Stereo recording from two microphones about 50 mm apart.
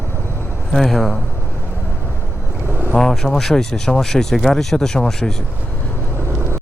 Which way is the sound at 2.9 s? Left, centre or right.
Centre.